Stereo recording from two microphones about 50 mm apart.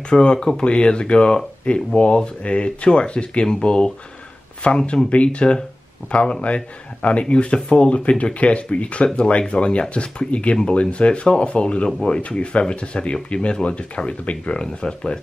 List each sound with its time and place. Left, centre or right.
0.1 s speech: centre